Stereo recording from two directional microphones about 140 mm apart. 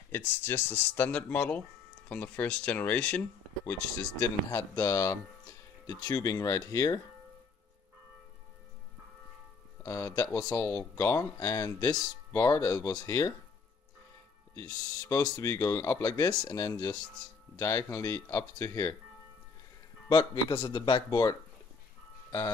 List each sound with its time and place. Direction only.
0.1 s speech: 15° left (ahead or behind)
4.0 s speech: 25° left (ahead or behind)
9.8 s speech: 20° left (ahead or behind)
14.5 s speech: 20° left (ahead or behind)
20.1 s a man's voice: 30° left (ahead or behind)